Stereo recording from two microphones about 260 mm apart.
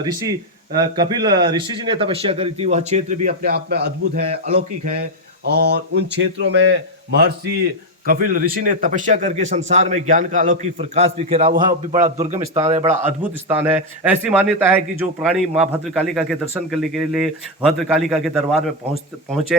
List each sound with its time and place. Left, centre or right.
0.0 s a man's voice: centre
13.5 s a man's voice: centre